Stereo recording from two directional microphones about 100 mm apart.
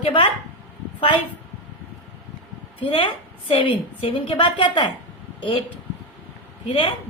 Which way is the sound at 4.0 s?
65° left (ahead or behind).